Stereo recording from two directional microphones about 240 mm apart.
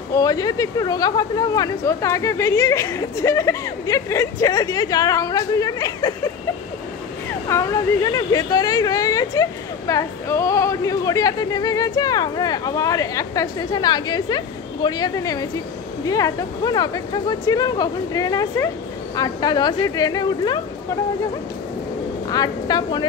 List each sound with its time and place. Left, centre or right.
0.1 s a woman's voice: centre
7.4 s a woman's voice: centre
22.3 s a woman's voice: centre